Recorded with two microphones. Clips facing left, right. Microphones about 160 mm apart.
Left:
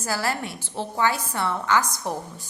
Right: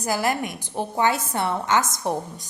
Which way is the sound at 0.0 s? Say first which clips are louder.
Right 3 dB; 15° right (ahead or behind).